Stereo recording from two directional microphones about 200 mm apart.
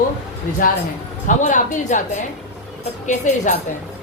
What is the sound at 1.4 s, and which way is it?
Speech, 40° left (ahead or behind).